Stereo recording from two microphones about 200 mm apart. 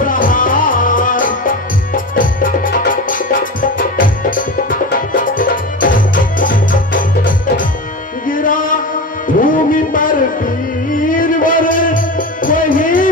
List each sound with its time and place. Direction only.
0.0 s music: 45° left (ahead or behind)